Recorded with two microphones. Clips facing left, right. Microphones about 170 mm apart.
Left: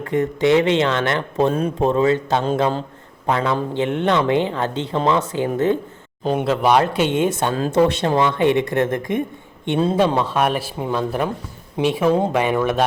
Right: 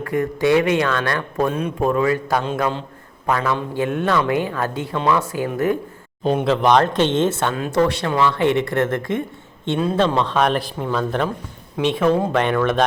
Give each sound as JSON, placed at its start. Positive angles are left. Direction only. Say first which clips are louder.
{"t": 0.0, "sound": "speech", "louder": "left 1 dB", "side_deg": 20}
{"t": 6.2, "sound": "speech", "louder": "right 1 dB", "side_deg": 5}
{"t": 7.5, "sound": "speech", "louder": "left 2 dB", "side_deg": 30}